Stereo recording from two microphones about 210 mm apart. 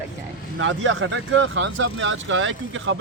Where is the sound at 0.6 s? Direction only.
65° right (ahead or behind).